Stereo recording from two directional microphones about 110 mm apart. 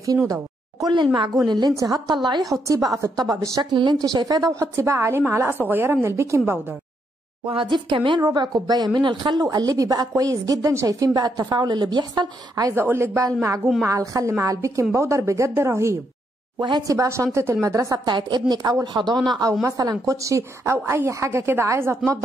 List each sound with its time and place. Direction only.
0.3 s speech: 35° right (ahead or behind)
3.7 s a woman's voice: 45° right (ahead or behind); by 6.6 s 25° right (ahead or behind)
7.4 s speech: 45° right (ahead or behind)
12.8 s a woman's voice: 25° right (ahead or behind)
18.0 s a woman's voice: 40° right (ahead or behind); by 22.2 s 25° right (ahead or behind)